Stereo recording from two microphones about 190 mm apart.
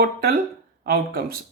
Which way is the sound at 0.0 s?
55° right (ahead or behind).